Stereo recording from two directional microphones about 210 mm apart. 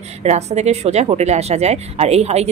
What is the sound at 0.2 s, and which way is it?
A woman's voice, 30° right (ahead or behind).